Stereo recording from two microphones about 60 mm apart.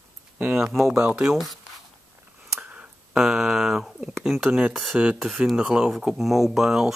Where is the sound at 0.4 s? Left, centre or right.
Right.